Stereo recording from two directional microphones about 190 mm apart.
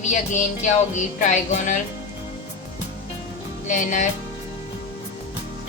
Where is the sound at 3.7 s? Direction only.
40° left (ahead or behind).